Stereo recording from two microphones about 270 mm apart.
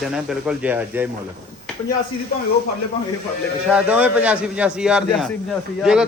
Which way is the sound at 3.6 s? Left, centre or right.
Centre.